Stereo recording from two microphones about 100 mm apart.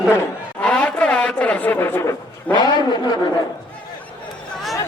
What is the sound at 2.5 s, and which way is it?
Speech, 45° left (ahead or behind).